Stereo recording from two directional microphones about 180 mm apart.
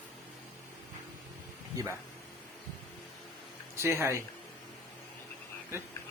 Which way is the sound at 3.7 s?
15° right (ahead or behind).